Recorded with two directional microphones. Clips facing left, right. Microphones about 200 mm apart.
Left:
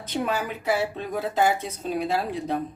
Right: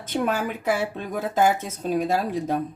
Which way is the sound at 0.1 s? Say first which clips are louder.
Right 2 dB; 50° right (ahead or behind).